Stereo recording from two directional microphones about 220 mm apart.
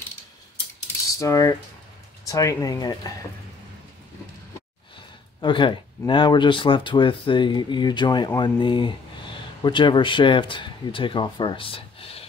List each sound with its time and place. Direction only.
1.1 s speech: 15° left (ahead or behind)
5.4 s speech: 20° left (ahead or behind)